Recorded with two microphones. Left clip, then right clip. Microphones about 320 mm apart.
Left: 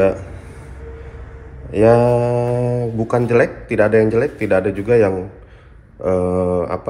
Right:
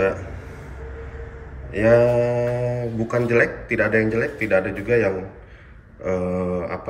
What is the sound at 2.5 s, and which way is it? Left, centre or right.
Mantra, left.